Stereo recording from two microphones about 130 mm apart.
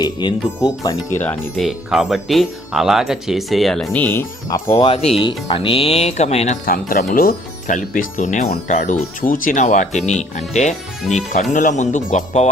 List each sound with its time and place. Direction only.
0.0 s speech: 35° left (ahead or behind)
1.5 s speech: centre (ahead or behind)
3.9 s speech: 15° left (ahead or behind)
4.8 s speech: 50° left (ahead or behind)
11.5 s speech: 75° left (ahead or behind)